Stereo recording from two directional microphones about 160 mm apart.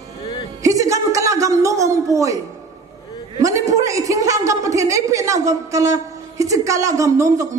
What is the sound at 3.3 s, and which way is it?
A woman's voice, 20° right (ahead or behind).